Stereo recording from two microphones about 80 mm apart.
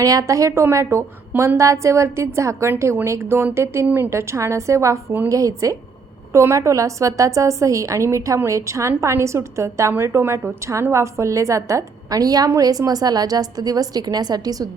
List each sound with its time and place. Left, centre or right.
0.0 s a woman's voice: right
3.8 s a woman's voice: right
4.1 s a woman's voice: right